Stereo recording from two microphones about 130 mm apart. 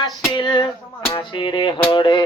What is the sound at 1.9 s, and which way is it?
Music, 40° left (ahead or behind).